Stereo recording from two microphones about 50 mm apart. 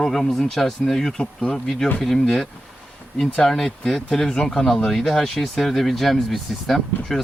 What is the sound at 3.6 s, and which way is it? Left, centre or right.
Speech, centre.